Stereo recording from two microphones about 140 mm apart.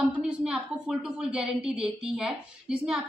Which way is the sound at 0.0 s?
5° right (ahead or behind).